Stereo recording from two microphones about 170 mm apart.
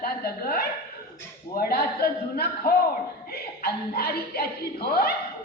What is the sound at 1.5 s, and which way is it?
Chuckle, 65° left (ahead or behind).